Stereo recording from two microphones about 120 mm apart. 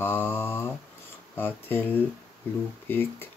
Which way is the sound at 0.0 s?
15° left (ahead or behind).